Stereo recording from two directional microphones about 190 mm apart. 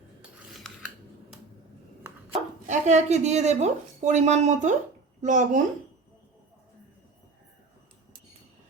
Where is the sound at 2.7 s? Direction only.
40° right (ahead or behind).